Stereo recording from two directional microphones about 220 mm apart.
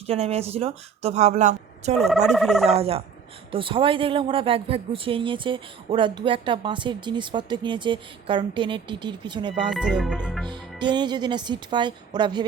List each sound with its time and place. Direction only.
0.1 s speech: 30° right (ahead or behind)
2.0 s speech: centre (ahead or behind)
2.6 s speech: 25° right (ahead or behind)
9.6 s speech: 5° right (ahead or behind)
10.4 s speech: 20° right (ahead or behind)